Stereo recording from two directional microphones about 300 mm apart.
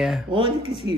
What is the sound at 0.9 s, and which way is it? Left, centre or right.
Speech, right.